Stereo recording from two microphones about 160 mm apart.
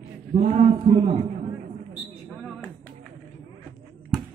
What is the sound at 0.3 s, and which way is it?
Speech, 45° right (ahead or behind).